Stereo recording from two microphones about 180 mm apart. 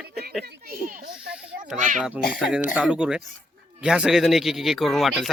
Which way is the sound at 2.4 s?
Centre (ahead or behind).